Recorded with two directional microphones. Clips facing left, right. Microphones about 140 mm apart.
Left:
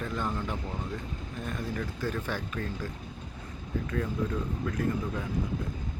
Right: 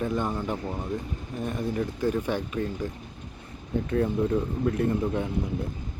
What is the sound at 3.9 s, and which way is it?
Speech, 30° right (ahead or behind).